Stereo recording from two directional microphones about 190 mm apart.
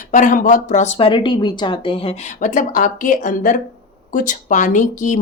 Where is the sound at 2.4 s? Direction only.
45° left (ahead or behind).